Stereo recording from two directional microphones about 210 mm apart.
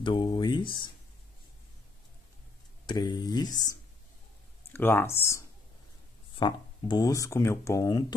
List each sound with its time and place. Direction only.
0.0 s speech: 20° left (ahead or behind)
2.9 s speech: 20° left (ahead or behind)
4.7 s speech: 10° left (ahead or behind)